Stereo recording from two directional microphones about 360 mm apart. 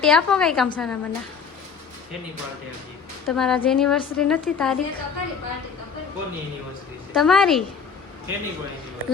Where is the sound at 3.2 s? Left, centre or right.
Centre.